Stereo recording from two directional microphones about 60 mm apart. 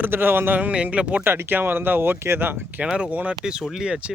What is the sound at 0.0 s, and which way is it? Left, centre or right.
Speech, right.